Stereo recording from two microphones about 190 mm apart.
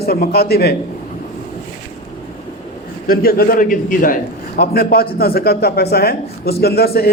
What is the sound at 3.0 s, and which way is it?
A man's voice, 50° left (ahead or behind).